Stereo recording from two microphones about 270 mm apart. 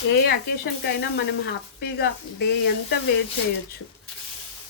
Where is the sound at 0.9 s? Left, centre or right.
Left.